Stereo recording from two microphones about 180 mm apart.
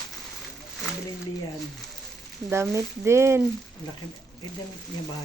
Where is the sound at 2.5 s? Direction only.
15° right (ahead or behind).